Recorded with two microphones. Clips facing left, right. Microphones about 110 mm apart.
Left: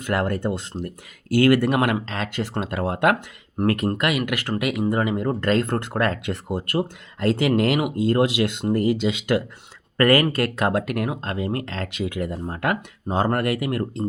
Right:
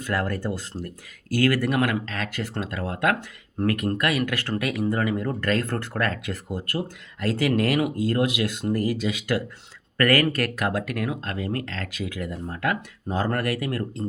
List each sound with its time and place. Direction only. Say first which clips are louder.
0.0 s speech: left 3 dB; 20° left (ahead or behind)